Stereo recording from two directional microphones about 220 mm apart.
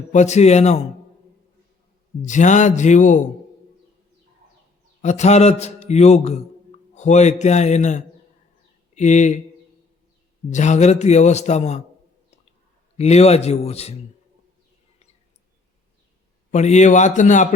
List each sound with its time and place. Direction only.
0.1 s a man's voice: 30° left (ahead or behind)
2.2 s a man's voice: 35° left (ahead or behind)
5.0 s a man's voice: 30° left (ahead or behind)
10.5 s a man's voice: 30° left (ahead or behind)
13.0 s a man's voice: 30° left (ahead or behind)
16.5 s a man's voice: 30° left (ahead or behind)